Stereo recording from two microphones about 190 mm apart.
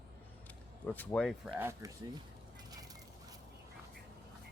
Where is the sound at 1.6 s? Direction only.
15° right (ahead or behind).